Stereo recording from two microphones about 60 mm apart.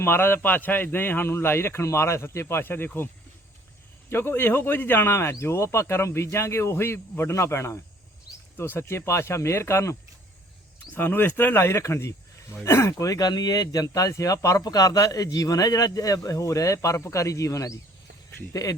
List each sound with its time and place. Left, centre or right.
0.0 s speech: left
4.1 s speech: left
8.5 s speech: left
10.9 s speech: left
18.5 s speech: left